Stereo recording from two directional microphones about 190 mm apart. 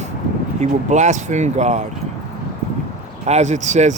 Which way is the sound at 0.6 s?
40° right (ahead or behind).